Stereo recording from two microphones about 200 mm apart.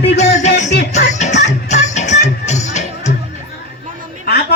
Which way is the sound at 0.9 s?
35° left (ahead or behind).